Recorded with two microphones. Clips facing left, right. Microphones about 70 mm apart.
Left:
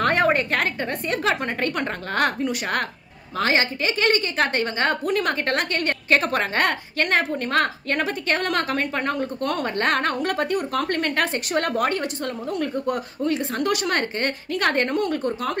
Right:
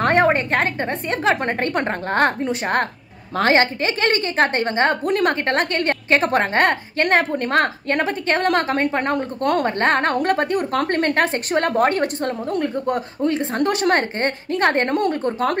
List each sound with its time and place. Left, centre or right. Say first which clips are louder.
0.0 s a woman's voice: right 3 dB; right